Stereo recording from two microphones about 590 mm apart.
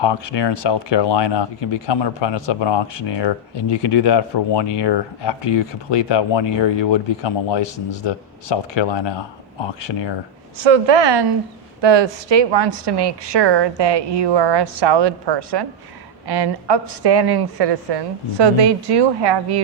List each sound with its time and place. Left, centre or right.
0.0 s speech: left
10.6 s a woman's voice: right